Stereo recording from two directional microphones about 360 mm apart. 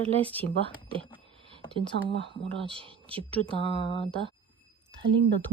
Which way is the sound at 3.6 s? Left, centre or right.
Centre.